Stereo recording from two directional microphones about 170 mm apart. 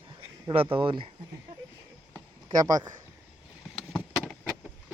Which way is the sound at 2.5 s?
20° right (ahead or behind).